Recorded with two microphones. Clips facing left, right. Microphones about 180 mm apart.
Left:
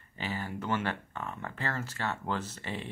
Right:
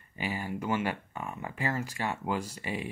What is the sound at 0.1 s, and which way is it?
Speech, 10° right (ahead or behind).